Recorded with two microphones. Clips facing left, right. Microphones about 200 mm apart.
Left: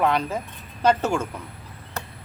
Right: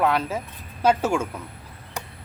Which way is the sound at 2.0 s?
15° right (ahead or behind).